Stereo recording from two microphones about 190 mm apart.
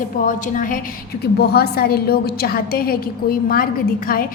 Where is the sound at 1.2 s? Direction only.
55° left (ahead or behind).